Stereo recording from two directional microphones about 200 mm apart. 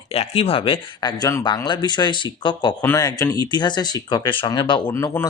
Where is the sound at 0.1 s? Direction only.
30° left (ahead or behind).